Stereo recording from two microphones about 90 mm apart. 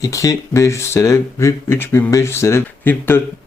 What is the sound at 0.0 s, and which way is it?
Speech, 35° left (ahead or behind).